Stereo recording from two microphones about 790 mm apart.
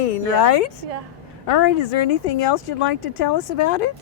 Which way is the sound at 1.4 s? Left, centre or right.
Left.